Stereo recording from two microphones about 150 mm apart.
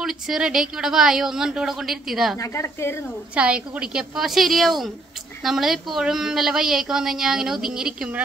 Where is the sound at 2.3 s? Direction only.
20° left (ahead or behind).